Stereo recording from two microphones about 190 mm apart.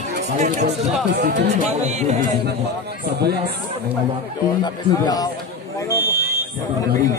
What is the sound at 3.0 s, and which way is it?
Speech, 60° right (ahead or behind).